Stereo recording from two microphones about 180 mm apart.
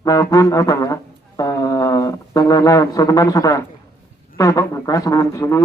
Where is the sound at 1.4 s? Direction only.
20° left (ahead or behind).